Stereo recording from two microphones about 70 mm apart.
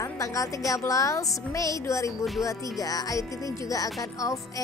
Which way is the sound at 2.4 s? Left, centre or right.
Left.